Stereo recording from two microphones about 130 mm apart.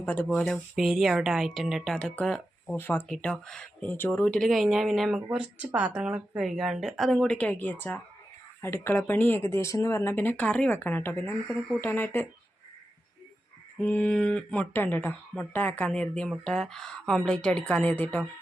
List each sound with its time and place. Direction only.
0.0 s speech: 10° left (ahead or behind)
2.7 s speech: 15° left (ahead or behind)
11.4 s speech: centre (ahead or behind)
11.8 s speech: 15° left (ahead or behind)
13.7 s speech: 10° left (ahead or behind)